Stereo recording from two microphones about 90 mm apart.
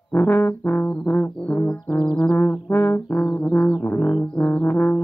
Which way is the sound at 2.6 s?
25° left (ahead or behind).